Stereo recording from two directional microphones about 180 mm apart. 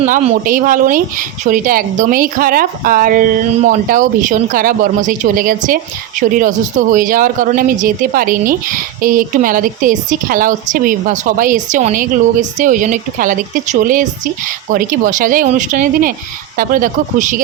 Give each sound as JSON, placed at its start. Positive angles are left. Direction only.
{"t": 0.0, "sound": "a woman's voice", "side_deg": -40}